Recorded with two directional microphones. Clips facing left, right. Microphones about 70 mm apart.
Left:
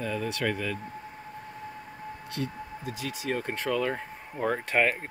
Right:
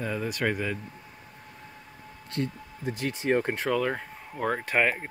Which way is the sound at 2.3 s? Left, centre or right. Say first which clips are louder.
Right 3 dB; left.